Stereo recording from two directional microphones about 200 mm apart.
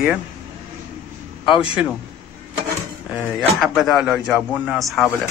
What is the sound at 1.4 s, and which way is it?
Speech, 25° left (ahead or behind).